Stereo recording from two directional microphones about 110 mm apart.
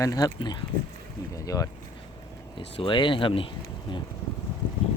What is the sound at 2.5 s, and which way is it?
Speech, 50° left (ahead or behind).